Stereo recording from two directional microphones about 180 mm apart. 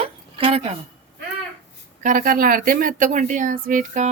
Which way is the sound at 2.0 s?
50° right (ahead or behind).